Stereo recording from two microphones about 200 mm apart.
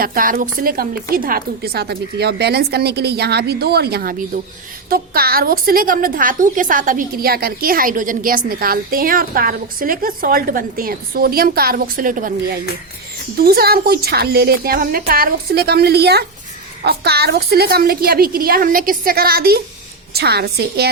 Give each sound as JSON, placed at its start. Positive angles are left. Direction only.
{"t": 0.0, "sound": "a woman's voice", "side_deg": -45}
{"t": 13.4, "sound": "a woman's voice", "side_deg": -50}